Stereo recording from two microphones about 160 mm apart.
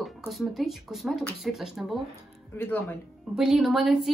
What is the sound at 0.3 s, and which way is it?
A woman's voice, centre (ahead or behind).